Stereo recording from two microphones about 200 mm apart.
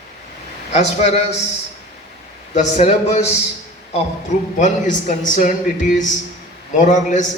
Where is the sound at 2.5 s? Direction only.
35° left (ahead or behind).